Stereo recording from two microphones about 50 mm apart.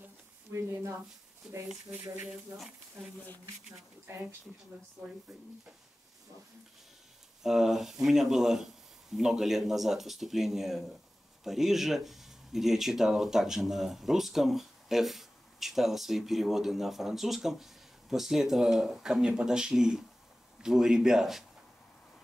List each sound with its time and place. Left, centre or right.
0.5 s speech: right
1.4 s speech: centre
2.2 s speech: centre
7.4 s speech: centre